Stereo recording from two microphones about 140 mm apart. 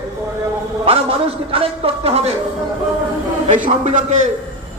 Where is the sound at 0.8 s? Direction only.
45° right (ahead or behind).